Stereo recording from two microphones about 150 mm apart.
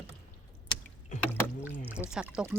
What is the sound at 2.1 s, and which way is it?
Speech, 5° right (ahead or behind).